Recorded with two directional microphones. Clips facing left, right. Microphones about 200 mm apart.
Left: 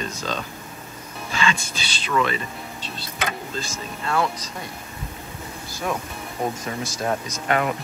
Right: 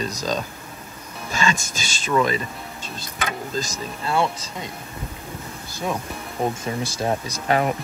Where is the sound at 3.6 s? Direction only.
35° right (ahead or behind).